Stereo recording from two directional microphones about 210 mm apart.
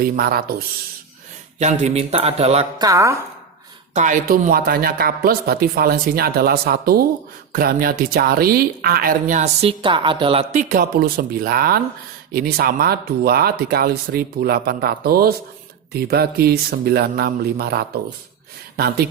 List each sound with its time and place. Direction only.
0.0 s speech: 45° right (ahead or behind)
1.5 s a sound: 35° right (ahead or behind)
2.8 s a woman's voice: 15° right (ahead or behind)
3.9 s speech: 35° right (ahead or behind)